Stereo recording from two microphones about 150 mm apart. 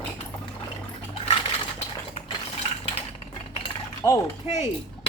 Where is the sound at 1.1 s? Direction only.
40° left (ahead or behind).